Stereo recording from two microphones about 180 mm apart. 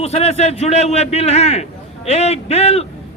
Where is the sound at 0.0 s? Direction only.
35° left (ahead or behind).